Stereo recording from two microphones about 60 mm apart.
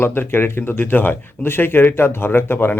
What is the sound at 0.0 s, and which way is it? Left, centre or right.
A man's voice, left.